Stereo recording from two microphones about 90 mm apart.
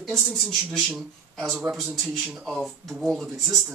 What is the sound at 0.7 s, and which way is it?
A man's voice, centre (ahead or behind).